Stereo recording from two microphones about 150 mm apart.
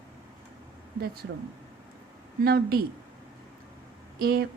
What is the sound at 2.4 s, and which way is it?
Speech, 90° right.